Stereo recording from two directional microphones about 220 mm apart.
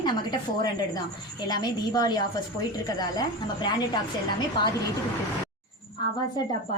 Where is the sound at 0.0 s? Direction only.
20° left (ahead or behind).